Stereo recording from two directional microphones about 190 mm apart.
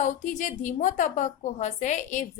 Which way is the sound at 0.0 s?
40° left (ahead or behind).